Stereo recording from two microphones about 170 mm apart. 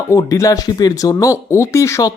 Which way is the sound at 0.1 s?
20° left (ahead or behind).